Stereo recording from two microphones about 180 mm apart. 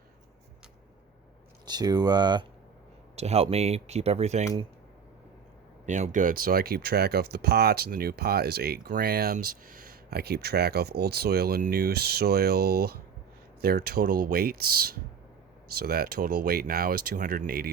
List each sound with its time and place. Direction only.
1.6 s speech: 20° right (ahead or behind)
3.2 s speech: 35° right (ahead or behind)
5.8 s speech: 45° right (ahead or behind)